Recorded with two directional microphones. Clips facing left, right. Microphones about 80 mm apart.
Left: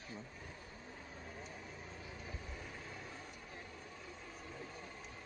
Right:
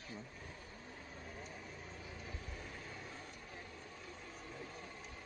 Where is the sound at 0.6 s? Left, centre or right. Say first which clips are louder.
Even; centre.